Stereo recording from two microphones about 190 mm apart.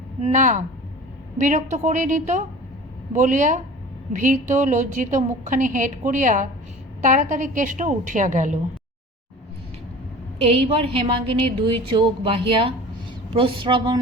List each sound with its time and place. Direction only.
0.2 s a woman's voice: 40° right (ahead or behind)
10.4 s a woman's voice: 30° right (ahead or behind)